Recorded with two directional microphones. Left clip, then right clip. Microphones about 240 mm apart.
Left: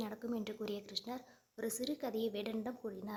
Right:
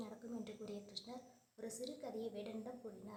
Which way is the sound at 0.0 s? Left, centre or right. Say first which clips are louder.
Left 8 dB; left.